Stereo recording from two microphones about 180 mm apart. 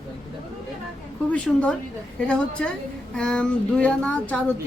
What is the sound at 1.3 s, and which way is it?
Speech, 5° left (ahead or behind).